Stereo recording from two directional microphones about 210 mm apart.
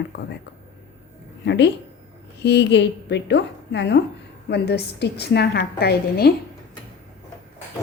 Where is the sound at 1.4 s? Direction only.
55° left (ahead or behind).